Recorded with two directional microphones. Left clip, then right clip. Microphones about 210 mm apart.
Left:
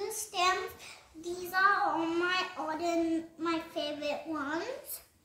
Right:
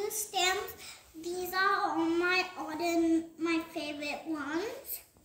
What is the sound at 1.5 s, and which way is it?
Child singing, 20° left (ahead or behind).